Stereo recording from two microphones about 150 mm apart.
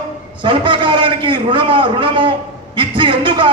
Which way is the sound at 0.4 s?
35° right (ahead or behind).